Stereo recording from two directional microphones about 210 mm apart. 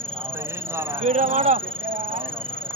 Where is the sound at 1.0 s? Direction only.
35° right (ahead or behind).